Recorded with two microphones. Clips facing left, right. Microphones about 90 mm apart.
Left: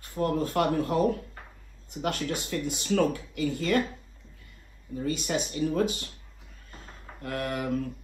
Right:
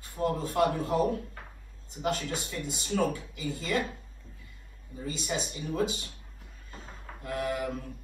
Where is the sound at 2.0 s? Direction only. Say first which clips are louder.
Left 1 dB; 60° left (ahead or behind).